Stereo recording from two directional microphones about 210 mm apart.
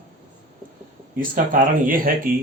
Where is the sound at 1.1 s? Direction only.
40° right (ahead or behind).